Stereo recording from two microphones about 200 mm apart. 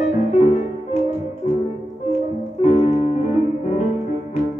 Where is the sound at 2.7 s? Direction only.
30° left (ahead or behind).